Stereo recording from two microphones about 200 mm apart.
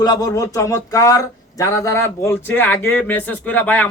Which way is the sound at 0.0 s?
20° left (ahead or behind).